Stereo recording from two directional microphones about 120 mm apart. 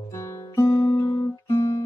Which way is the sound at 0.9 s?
35° left (ahead or behind).